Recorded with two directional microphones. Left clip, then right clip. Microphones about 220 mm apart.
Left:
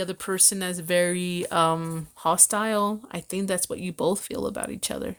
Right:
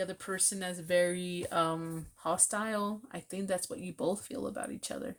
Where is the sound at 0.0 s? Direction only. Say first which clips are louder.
Left 9 dB; 40° left (ahead or behind).